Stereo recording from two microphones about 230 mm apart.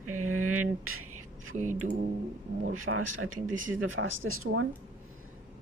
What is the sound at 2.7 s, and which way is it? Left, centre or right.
Speech, right.